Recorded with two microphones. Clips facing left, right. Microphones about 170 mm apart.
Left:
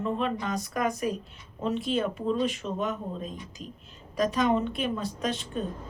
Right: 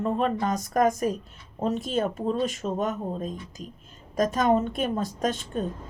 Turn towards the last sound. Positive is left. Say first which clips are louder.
# right 3 dB
turn(degrees=-45)  # may be behind; listen again after turning